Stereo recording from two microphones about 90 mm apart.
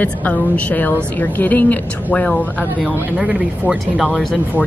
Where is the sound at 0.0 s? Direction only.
15° left (ahead or behind).